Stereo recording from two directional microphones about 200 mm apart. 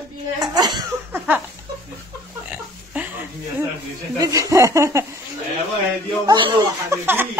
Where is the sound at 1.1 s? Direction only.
10° right (ahead or behind).